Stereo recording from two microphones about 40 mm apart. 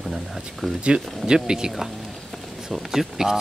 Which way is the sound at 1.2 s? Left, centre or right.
Centre.